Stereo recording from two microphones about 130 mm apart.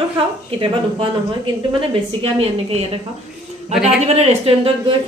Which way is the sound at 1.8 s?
45° right (ahead or behind).